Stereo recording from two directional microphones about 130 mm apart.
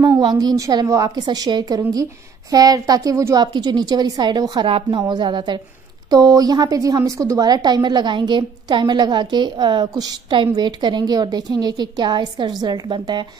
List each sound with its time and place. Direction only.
0.2 s a woman's voice: 35° right (ahead or behind)